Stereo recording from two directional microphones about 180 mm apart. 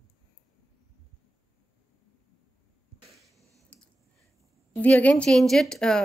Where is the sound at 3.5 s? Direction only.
5° left (ahead or behind).